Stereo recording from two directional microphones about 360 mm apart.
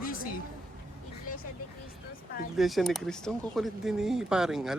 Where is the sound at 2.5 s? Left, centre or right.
Centre.